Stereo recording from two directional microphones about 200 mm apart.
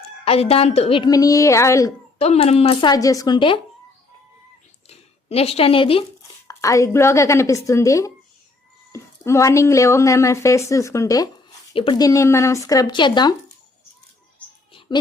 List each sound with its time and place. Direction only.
0.3 s speech: 30° left (ahead or behind)
2.1 s speech: 30° left (ahead or behind)
4.9 s speech: 30° left (ahead or behind)
6.5 s a woman's voice: 15° left (ahead or behind)
14.7 s a sound: 25° left (ahead or behind)